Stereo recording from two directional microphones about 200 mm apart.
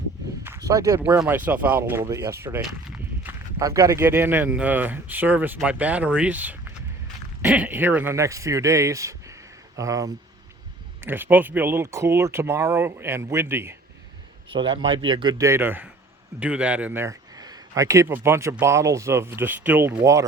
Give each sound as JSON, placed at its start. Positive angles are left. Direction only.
{"t": 0.7, "sound": "speech", "side_deg": -15}
{"t": 14.5, "sound": "a man's voice", "side_deg": -25}